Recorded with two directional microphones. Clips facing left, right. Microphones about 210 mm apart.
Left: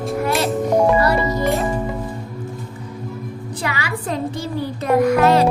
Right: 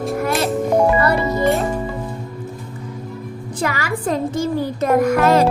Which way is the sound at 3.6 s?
45° right (ahead or behind).